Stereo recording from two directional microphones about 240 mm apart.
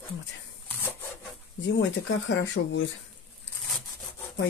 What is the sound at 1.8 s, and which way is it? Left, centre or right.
Speech, left.